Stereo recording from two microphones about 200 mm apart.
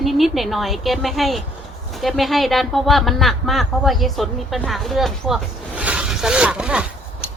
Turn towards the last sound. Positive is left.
turn(degrees=-5)  # may be behind; listen again after turning